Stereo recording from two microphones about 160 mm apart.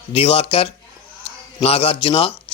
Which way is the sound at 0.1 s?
35° left (ahead or behind).